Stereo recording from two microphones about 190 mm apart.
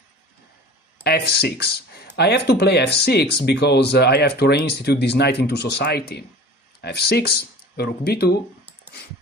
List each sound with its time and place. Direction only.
1.0 s speech: 55° left (ahead or behind)